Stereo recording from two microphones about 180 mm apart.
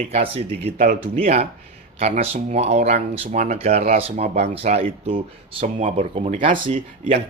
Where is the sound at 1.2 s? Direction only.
35° right (ahead or behind).